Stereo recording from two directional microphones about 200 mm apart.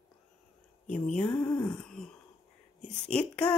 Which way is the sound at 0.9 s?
5° left (ahead or behind).